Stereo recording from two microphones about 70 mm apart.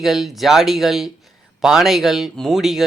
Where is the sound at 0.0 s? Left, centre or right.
Centre.